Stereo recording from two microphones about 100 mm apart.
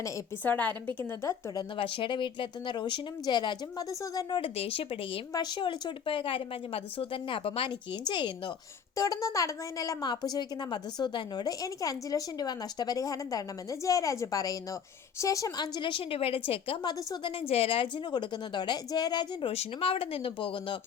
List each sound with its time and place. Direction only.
0.4 s a woman's voice: 20° left (ahead or behind)
1.5 s speech: 60° left (ahead or behind)
4.0 s speech: 40° left (ahead or behind)
4.4 s speech: 75° left (ahead or behind)
5.3 s a woman's voice: 45° left (ahead or behind); by 7.7 s 65° left (ahead or behind)
8.0 s speech: 50° left (ahead or behind)
9.0 s a woman's voice: 35° left (ahead or behind); by 16.7 s 75° left (ahead or behind)
16.8 s speech: 45° left (ahead or behind)
17.5 s speech: 75° left (ahead or behind); by 19.5 s 45° left (ahead or behind)
19.5 s a woman's voice: 65° left (ahead or behind)